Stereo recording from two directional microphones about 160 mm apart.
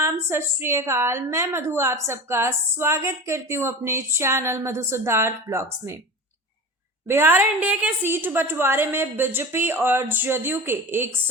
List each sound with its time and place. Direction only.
0.0 s a woman's voice: 15° right (ahead or behind)
7.1 s a woman's voice: 15° right (ahead or behind)